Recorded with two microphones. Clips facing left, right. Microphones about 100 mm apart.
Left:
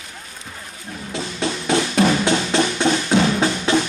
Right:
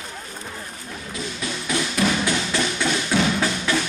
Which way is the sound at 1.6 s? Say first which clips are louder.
Left 5 dB; 30° left (ahead or behind).